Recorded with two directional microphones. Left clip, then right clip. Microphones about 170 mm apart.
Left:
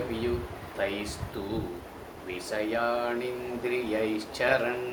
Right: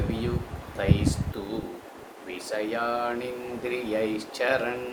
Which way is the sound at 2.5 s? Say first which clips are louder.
Even; 20° right (ahead or behind).